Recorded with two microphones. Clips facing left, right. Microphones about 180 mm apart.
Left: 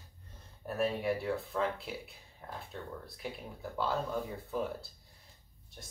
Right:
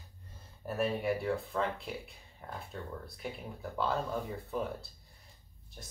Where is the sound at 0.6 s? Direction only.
Centre (ahead or behind).